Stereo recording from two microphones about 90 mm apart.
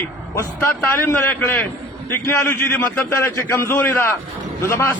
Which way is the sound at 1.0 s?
20° left (ahead or behind).